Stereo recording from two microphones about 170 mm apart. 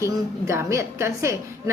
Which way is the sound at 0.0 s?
15° right (ahead or behind).